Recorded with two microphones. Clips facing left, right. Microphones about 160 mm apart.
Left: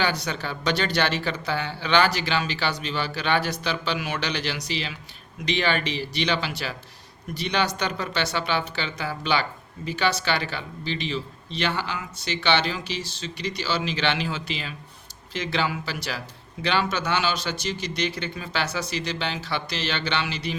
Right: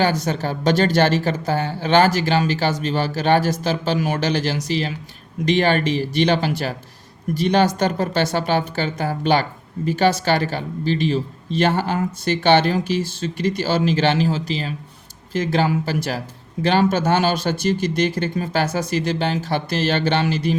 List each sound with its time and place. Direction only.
0.0 s speech: 45° right (ahead or behind)